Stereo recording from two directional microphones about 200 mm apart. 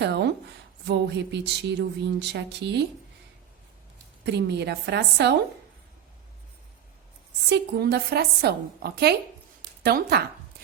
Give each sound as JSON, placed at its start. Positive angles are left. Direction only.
{"t": 0.0, "sound": "speech", "side_deg": -60}
{"t": 4.3, "sound": "speech", "side_deg": -55}
{"t": 7.5, "sound": "a woman's voice", "side_deg": -55}